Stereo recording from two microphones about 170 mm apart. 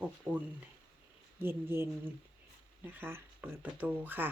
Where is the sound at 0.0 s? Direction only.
10° right (ahead or behind).